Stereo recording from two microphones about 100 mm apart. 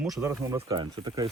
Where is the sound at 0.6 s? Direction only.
45° right (ahead or behind).